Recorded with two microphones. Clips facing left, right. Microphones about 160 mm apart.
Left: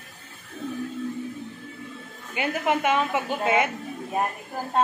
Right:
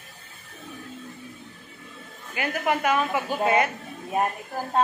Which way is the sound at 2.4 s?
20° left (ahead or behind).